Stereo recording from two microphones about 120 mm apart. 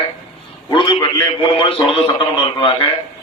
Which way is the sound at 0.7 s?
40° left (ahead or behind).